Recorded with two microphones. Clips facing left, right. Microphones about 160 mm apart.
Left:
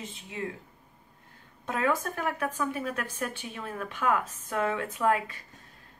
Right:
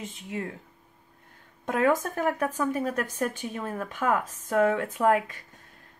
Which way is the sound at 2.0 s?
45° right (ahead or behind).